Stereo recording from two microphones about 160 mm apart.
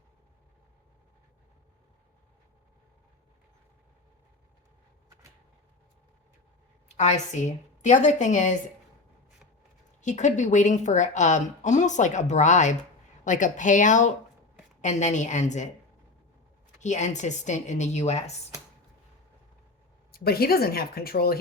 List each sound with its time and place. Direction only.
6.9 s a woman's voice: 45° left (ahead or behind)
10.0 s a woman's voice: 50° left (ahead or behind)
16.8 s a woman's voice: 45° left (ahead or behind)
20.1 s speech: 70° left (ahead or behind)